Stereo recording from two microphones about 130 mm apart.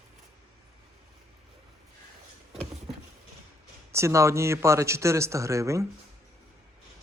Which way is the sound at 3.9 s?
20° right (ahead or behind).